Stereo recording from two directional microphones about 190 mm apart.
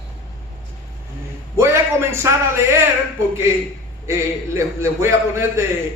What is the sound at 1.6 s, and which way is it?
A man's voice, 15° right (ahead or behind).